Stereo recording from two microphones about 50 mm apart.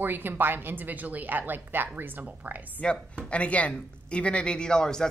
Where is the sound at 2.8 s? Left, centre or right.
Left.